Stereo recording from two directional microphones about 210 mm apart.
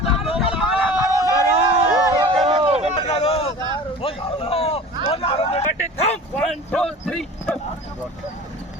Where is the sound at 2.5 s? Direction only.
25° right (ahead or behind).